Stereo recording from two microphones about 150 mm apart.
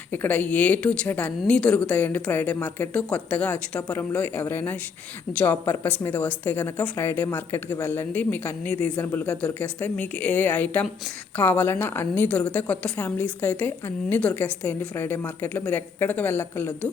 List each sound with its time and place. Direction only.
0.1 s a woman's voice: 10° left (ahead or behind)